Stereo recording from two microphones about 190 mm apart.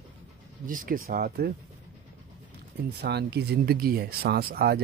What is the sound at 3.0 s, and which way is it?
Speech, 60° right (ahead or behind).